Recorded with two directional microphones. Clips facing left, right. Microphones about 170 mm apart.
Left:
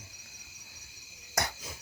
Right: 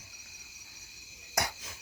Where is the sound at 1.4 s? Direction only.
10° right (ahead or behind).